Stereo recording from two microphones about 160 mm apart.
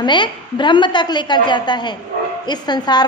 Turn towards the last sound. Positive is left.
turn(degrees=25)  # may be behind; listen again after turning